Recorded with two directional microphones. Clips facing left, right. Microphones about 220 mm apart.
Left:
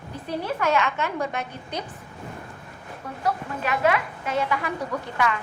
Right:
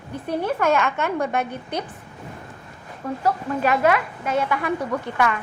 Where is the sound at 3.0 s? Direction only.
50° right (ahead or behind).